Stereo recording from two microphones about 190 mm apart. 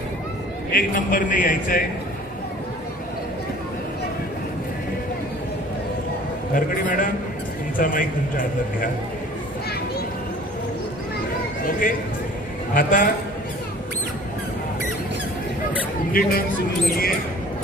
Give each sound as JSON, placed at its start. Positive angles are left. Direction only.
{"t": 0.7, "sound": "a man's voice", "side_deg": 50}
{"t": 6.5, "sound": "a man's voice", "side_deg": 45}
{"t": 11.6, "sound": "a man's voice", "side_deg": 45}
{"t": 16.2, "sound": "a man's voice", "side_deg": 50}